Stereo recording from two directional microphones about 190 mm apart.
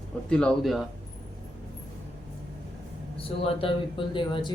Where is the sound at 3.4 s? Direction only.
25° left (ahead or behind).